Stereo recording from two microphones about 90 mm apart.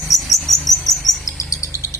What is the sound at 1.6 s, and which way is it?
Bird, 35° left (ahead or behind).